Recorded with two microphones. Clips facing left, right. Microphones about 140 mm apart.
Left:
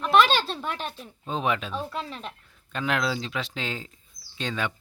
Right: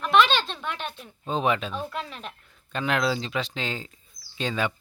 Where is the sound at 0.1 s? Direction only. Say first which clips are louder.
Even; 40° left (ahead or behind).